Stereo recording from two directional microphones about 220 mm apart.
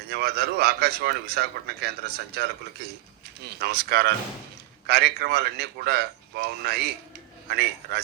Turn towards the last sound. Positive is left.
turn(degrees=-45)  # may be behind; listen again after turning